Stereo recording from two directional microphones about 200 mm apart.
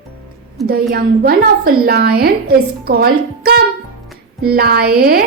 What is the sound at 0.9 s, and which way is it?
A woman's voice, 50° right (ahead or behind).